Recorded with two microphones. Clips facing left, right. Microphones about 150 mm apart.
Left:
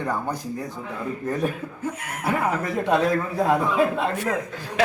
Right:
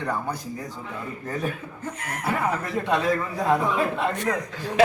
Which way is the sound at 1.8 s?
10° left (ahead or behind).